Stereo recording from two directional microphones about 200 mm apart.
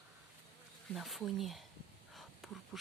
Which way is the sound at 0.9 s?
Centre (ahead or behind).